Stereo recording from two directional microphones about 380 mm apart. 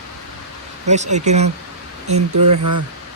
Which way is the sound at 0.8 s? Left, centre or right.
Centre.